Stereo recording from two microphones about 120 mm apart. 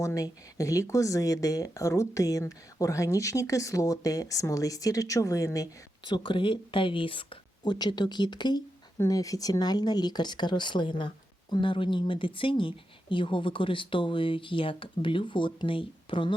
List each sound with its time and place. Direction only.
0.0 s speech: 30° left (ahead or behind)
6.1 s speech: 40° left (ahead or behind)